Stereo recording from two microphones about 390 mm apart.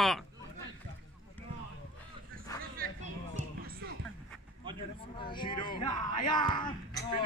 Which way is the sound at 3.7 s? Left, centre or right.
Right.